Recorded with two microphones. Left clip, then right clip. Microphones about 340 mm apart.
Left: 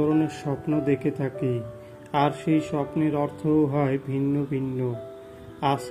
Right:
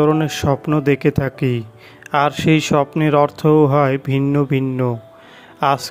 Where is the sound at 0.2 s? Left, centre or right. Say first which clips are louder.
Right 9 dB; right.